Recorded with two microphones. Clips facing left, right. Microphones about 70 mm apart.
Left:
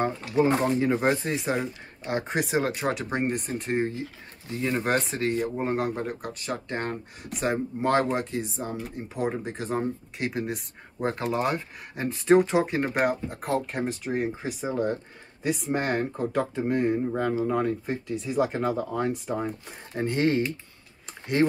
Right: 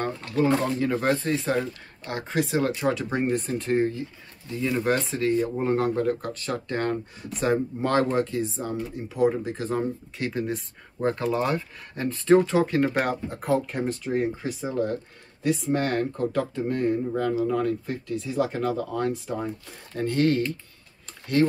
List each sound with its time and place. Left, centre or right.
0.0 s speech: centre
0.5 s speech: left
4.5 s speech: left; by 11.1 s centre
11.3 s speech: left
13.0 s speech: centre